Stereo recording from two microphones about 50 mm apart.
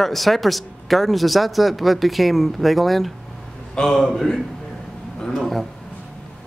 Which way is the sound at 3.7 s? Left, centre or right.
Centre.